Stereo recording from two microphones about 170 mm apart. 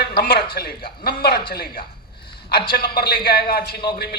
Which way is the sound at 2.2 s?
70° left (ahead or behind).